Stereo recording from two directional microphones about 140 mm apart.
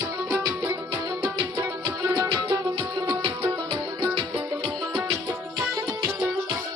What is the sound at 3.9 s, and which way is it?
Music, 25° right (ahead or behind).